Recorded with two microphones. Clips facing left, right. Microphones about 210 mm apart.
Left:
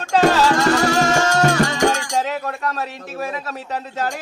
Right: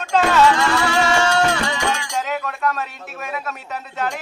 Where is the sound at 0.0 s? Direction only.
40° left (ahead or behind).